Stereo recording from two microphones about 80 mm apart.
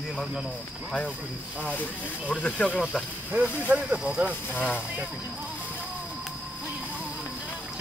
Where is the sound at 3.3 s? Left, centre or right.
Centre.